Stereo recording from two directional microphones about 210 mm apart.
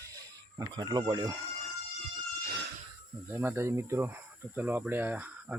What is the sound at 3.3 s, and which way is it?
Speech, 10° right (ahead or behind).